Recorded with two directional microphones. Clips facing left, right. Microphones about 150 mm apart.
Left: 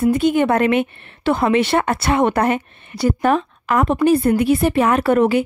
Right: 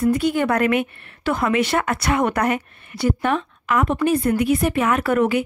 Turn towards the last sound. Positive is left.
turn(degrees=30)  # may be behind; listen again after turning